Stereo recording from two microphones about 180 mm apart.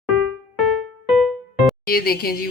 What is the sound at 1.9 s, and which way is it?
Speech, 55° left (ahead or behind).